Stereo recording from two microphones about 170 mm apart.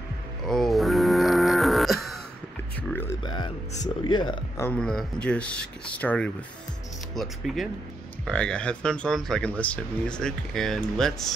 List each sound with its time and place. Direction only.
0.5 s a sound: centre (ahead or behind)
2.9 s music: 15° left (ahead or behind)
3.3 s music: 25° left (ahead or behind)
4.0 s speech: 25° left (ahead or behind)
4.6 s speech: 5° left (ahead or behind)